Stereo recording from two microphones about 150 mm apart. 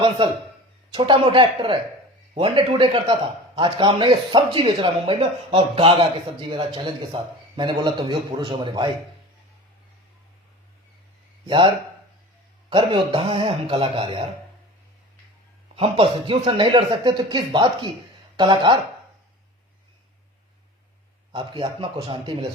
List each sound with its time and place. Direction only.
0.9 s a man's voice: 35° right (ahead or behind)
11.4 s a man's voice: 35° right (ahead or behind)
12.7 s a man's voice: 35° right (ahead or behind)
15.7 s a man's voice: 40° right (ahead or behind)
21.3 s a man's voice: 30° right (ahead or behind)